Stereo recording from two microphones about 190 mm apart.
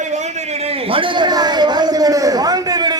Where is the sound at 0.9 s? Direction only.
25° right (ahead or behind).